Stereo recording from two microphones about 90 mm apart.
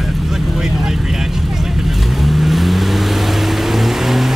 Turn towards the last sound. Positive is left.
turn(degrees=0)  # may be behind; listen again after turning